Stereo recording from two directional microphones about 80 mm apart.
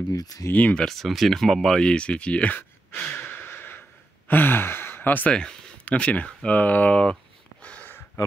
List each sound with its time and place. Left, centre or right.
0.1 s speech: left
0.5 s speech: centre
0.8 s speech: centre
3.2 s a sound: left
4.3 s speech: left
7.6 s a sound: centre